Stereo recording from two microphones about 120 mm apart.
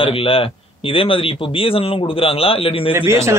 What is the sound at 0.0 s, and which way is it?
Speech, 50° left (ahead or behind).